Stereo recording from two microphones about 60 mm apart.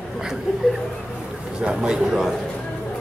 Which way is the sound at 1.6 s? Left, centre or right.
Centre.